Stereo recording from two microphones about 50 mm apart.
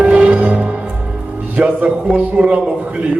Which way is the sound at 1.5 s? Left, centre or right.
Right.